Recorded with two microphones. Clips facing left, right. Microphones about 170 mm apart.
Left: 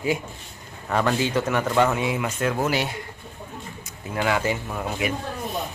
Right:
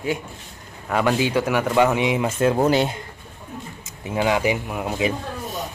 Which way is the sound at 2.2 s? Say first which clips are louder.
Right 6 dB; 30° right (ahead or behind).